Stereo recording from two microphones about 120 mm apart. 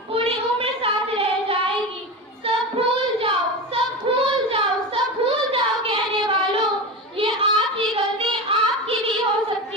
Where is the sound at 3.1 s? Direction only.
50° right (ahead or behind).